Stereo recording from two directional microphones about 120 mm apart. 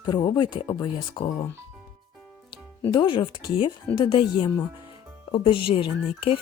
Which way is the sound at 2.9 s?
40° left (ahead or behind).